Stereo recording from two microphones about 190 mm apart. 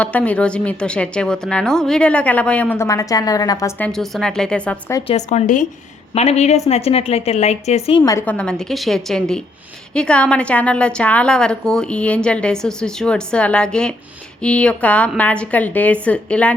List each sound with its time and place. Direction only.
0.0 s a woman's voice: 5° left (ahead or behind)
5.1 s a woman's voice: 35° left (ahead or behind)
8.0 s a woman's voice: 10° left (ahead or behind)